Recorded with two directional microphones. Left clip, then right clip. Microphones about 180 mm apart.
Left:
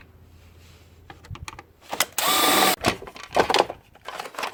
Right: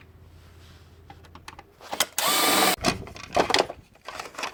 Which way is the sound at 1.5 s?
15° left (ahead or behind).